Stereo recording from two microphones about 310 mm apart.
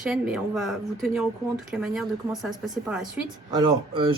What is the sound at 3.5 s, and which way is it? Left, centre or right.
Speech, centre.